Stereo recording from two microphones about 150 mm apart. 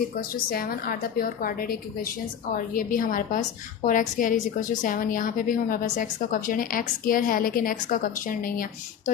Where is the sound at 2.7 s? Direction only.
65° left (ahead or behind).